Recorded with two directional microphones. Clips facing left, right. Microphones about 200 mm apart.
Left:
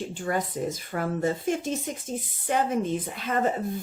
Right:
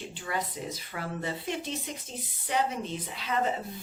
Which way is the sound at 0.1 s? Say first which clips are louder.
Left 6 dB; 45° left (ahead or behind).